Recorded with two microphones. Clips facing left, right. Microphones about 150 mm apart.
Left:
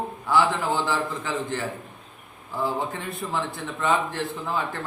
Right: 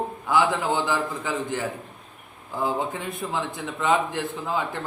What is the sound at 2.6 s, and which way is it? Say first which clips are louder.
A man's voice: right 2 dB; 20° right (ahead or behind).